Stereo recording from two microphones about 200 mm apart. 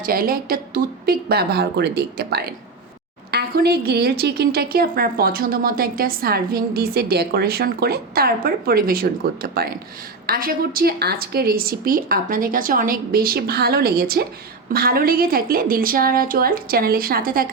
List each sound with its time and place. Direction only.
0.0 s a woman's voice: 45° right (ahead or behind)